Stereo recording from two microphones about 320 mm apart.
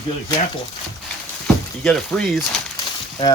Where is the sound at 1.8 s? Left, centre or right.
Centre.